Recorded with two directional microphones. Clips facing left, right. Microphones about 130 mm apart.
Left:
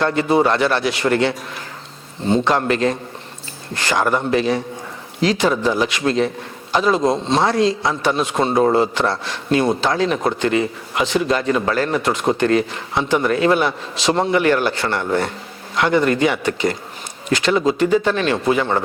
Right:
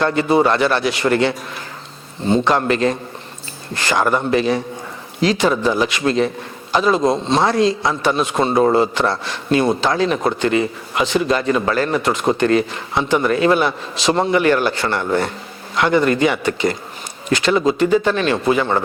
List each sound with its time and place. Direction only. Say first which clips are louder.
0.0 s a man's voice: right 1 dB; 15° right (ahead or behind)
2.4 s a man's voice: right 1 dB; 10° right (ahead or behind)